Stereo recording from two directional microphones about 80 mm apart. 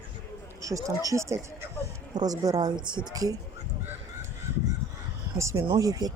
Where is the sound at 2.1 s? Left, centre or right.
Right.